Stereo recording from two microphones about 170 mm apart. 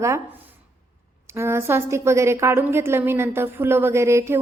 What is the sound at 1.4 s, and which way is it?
A woman's voice, 15° right (ahead or behind).